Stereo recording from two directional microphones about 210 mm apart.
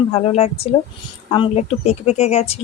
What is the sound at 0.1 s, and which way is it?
Speech, 30° left (ahead or behind).